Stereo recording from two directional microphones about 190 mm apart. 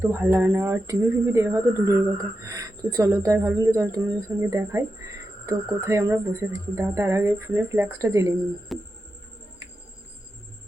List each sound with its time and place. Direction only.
0.0 s speech: 10° right (ahead or behind)
8.7 s music: centre (ahead or behind)